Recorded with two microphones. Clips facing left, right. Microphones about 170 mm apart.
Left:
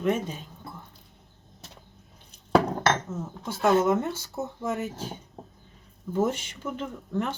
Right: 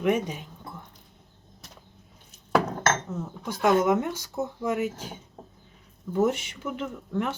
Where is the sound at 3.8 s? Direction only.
15° right (ahead or behind).